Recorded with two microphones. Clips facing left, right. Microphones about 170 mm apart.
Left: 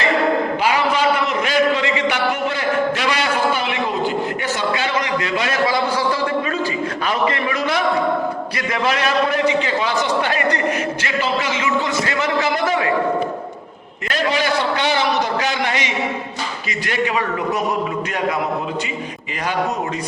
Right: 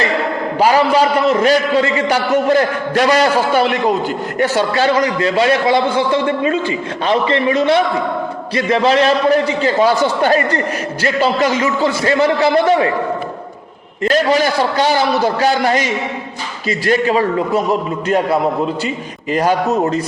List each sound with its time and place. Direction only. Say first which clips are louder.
0.6 s a man's voice: right 10 dB; 35° right (ahead or behind)
14.0 s a man's voice: right 7 dB; 40° right (ahead or behind)
19.3 s a man's voice: right 11 dB; 40° right (ahead or behind)